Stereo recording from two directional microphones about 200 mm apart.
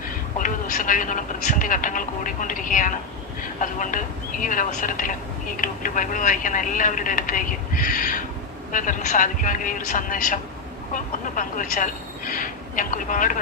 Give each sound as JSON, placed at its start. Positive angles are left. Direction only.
{"t": 0.0, "sound": "speech", "side_deg": 40}